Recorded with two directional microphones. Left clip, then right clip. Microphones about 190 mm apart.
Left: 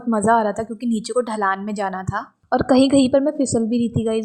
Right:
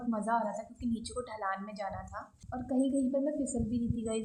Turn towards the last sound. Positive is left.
turn(degrees=35)  # may be behind; listen again after turning